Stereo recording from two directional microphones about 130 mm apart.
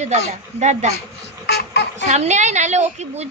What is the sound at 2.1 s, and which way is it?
A woman's voice, 65° right (ahead or behind).